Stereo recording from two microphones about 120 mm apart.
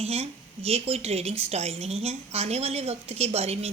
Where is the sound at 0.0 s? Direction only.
60° right (ahead or behind).